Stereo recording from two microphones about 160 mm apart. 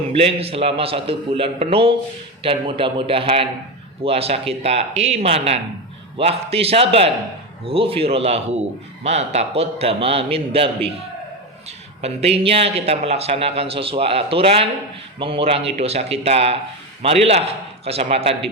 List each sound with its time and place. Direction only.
0.1 s a man's voice: 40° right (ahead or behind)
12.0 s a man's voice: 40° right (ahead or behind)